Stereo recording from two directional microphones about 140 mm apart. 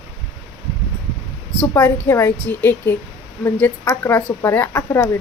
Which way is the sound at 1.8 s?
15° left (ahead or behind).